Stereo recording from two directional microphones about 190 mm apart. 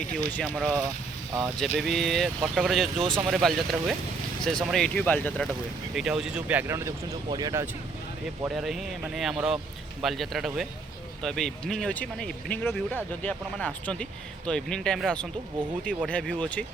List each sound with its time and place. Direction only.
0.3 s speech: 10° left (ahead or behind)
3.0 s speech: 25° right (ahead or behind)
3.2 s speech: centre (ahead or behind)
5.9 s speech: 5° right (ahead or behind)
8.4 s speech: centre (ahead or behind)